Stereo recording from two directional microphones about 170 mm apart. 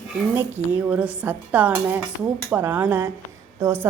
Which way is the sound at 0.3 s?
10° right (ahead or behind).